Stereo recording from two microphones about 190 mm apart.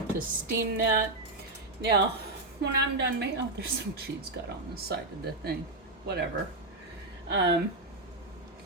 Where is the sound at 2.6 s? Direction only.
65° right (ahead or behind).